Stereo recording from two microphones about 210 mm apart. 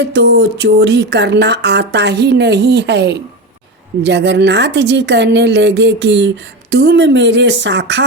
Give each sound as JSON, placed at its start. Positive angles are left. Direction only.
{"t": 0.1, "sound": "a woman's voice", "side_deg": -55}